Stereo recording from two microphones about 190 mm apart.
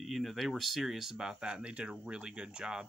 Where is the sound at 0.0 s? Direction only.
Centre (ahead or behind).